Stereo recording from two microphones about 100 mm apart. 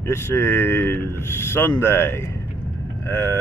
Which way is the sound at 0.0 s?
25° left (ahead or behind).